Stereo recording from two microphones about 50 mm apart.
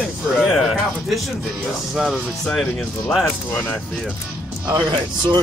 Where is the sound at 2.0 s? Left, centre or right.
Centre.